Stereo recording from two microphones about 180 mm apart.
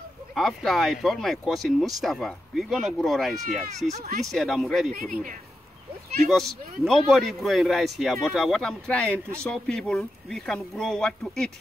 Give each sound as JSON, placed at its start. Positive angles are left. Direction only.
{"t": 0.4, "sound": "speech", "side_deg": 0}
{"t": 6.2, "sound": "speech", "side_deg": 0}